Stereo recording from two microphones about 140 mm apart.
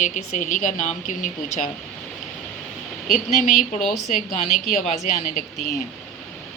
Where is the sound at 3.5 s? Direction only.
Centre (ahead or behind).